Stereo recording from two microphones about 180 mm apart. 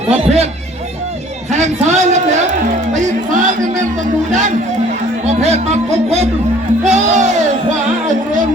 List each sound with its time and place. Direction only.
0.2 s a man's voice: 35° right (ahead or behind)
1.5 s a man's voice: 40° right (ahead or behind)
2.9 s music: 45° right (ahead or behind)
4.3 s a man's voice: 40° right (ahead or behind)
6.8 s music: 40° right (ahead or behind)